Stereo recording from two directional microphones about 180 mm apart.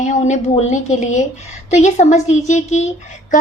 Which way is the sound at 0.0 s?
40° left (ahead or behind).